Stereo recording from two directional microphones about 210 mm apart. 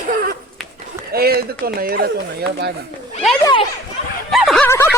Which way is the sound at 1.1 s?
45° right (ahead or behind).